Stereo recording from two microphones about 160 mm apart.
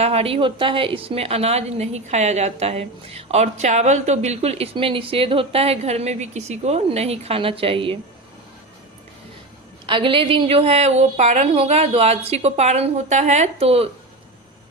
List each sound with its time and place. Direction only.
0.0 s a woman's voice: 40° right (ahead or behind)
9.8 s a woman's voice: 30° right (ahead or behind)